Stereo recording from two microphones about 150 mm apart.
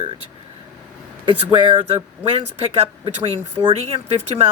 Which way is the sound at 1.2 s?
35° right (ahead or behind).